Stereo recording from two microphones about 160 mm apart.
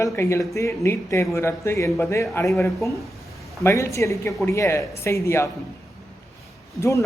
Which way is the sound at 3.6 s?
15° left (ahead or behind).